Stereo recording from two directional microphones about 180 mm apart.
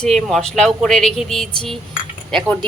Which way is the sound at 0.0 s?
Centre (ahead or behind).